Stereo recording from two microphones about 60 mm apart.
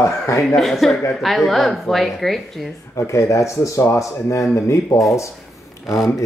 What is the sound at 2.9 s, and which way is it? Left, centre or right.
Speech, left.